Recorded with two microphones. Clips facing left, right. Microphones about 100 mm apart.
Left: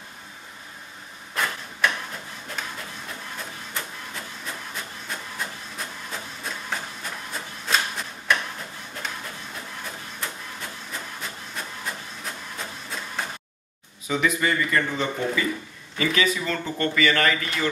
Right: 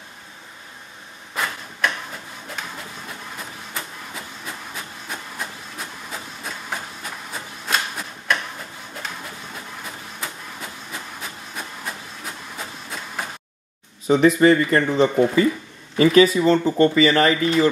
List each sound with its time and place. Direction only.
1.3 s a sound: 5° right (ahead or behind)
5.0 s printer: 5° right (ahead or behind)
10.2 s printer: 5° right (ahead or behind)
14.0 s speech: 35° right (ahead or behind)